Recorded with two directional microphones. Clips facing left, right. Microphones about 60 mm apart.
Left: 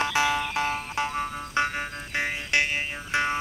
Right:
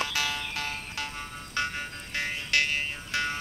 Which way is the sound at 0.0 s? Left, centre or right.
Left.